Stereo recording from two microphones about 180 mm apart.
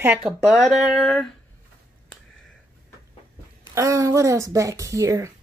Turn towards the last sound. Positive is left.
turn(degrees=-15)  # may be behind; listen again after turning